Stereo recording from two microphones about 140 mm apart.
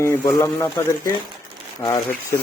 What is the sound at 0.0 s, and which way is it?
Speech, 20° left (ahead or behind).